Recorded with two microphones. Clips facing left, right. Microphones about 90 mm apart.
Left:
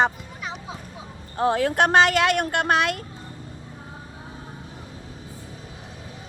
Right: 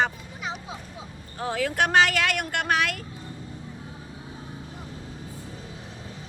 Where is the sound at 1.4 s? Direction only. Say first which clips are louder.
Left 5 dB; 40° left (ahead or behind).